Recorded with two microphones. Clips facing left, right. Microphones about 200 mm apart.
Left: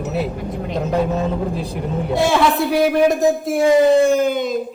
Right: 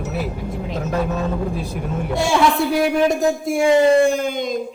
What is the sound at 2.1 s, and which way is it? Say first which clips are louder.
A man's voice: left 1 dB; centre (ahead or behind).